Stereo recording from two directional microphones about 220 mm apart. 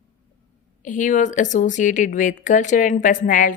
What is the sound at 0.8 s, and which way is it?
Speech, 35° left (ahead or behind).